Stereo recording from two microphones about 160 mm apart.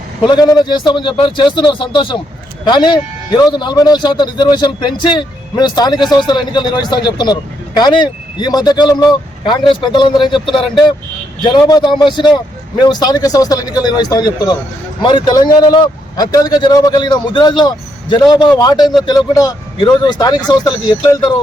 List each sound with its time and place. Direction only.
0.3 s a man's voice: 25° left (ahead or behind)